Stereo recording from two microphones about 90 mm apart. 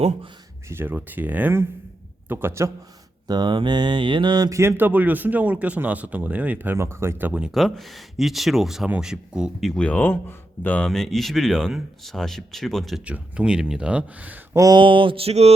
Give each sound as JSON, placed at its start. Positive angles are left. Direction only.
{"t": 0.7, "sound": "speech", "side_deg": -25}
{"t": 3.2, "sound": "mantra", "side_deg": -50}
{"t": 4.5, "sound": "speech", "side_deg": -25}
{"t": 6.7, "sound": "speech", "side_deg": -30}
{"t": 7.5, "sound": "speech", "side_deg": 0}
{"t": 9.7, "sound": "speech", "side_deg": 15}
{"t": 10.8, "sound": "speech", "side_deg": 5}
{"t": 13.1, "sound": "speech", "side_deg": -15}
{"t": 14.5, "sound": "speech", "side_deg": -40}
{"t": 14.8, "sound": "a sound", "side_deg": -70}